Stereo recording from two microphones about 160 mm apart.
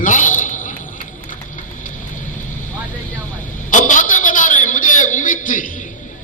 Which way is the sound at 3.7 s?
55° left (ahead or behind).